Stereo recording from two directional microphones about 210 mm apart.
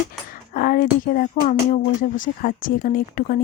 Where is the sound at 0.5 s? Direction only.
40° left (ahead or behind).